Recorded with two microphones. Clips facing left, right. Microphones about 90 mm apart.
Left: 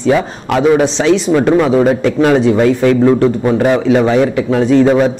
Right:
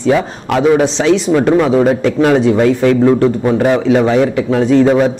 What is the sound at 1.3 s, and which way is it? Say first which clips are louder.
A man's voice: even; 25° left (ahead or behind).